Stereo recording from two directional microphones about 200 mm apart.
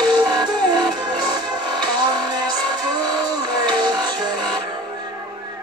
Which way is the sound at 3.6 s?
20° right (ahead or behind).